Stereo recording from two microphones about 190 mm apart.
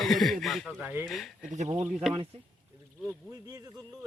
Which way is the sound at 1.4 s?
35° right (ahead or behind).